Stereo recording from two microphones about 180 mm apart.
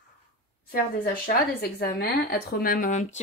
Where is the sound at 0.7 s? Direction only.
55° left (ahead or behind).